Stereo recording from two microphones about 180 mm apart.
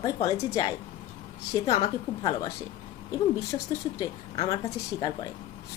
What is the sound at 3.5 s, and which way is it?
A woman's voice, 20° left (ahead or behind).